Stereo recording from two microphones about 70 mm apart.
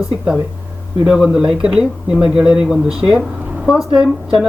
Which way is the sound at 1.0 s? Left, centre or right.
Centre.